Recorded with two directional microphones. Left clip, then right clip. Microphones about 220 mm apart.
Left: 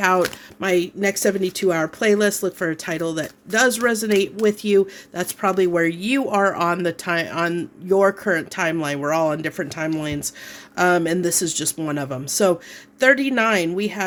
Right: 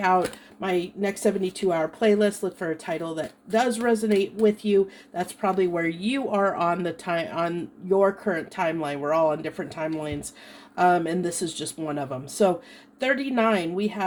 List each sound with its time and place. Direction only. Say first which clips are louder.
0.6 s speech: left 6 dB; 45° left (ahead or behind)